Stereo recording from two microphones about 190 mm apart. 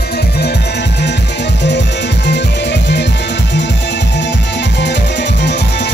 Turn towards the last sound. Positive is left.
turn(degrees=60)  # may be behind; listen again after turning